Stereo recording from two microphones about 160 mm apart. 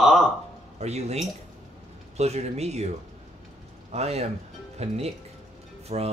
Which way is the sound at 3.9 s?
40° right (ahead or behind).